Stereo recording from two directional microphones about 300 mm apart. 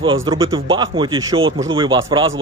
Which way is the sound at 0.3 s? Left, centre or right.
Centre.